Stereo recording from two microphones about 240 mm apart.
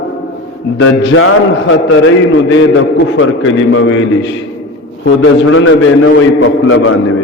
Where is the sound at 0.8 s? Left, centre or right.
Left.